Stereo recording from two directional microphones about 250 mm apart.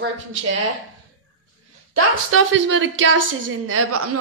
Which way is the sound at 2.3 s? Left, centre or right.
Right.